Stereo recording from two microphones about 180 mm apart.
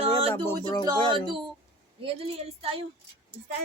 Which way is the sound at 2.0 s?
30° right (ahead or behind).